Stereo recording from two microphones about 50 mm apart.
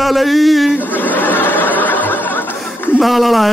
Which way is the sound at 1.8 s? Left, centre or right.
Left.